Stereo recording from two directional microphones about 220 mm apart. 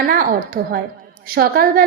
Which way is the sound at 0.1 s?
40° right (ahead or behind).